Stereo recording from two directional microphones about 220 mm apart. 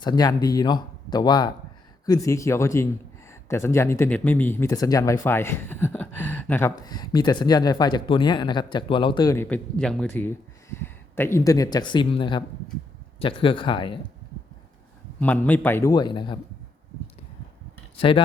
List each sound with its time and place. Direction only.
0.0 s speech: 20° left (ahead or behind)
15.2 s speech: 5° left (ahead or behind)